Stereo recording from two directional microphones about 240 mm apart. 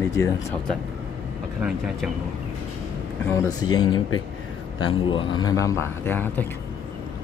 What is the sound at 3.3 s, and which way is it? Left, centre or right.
Speech, centre.